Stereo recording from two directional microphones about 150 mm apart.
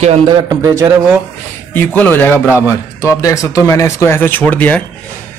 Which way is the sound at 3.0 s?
20° left (ahead or behind).